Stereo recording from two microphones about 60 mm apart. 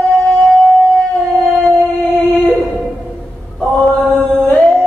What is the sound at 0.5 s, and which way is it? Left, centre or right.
Shofar, centre.